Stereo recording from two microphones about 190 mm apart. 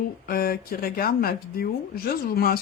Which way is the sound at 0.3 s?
50° left (ahead or behind).